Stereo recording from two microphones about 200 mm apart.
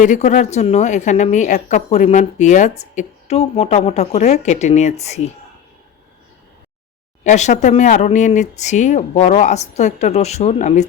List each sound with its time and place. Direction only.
0.0 s a woman's voice: 35° left (ahead or behind)
7.3 s a woman's voice: 35° left (ahead or behind)